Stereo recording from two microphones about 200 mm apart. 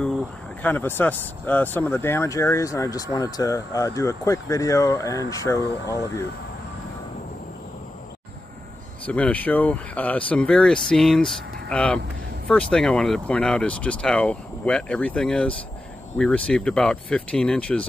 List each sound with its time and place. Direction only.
0.6 s speech: 10° left (ahead or behind)
9.0 s speech: 5° left (ahead or behind)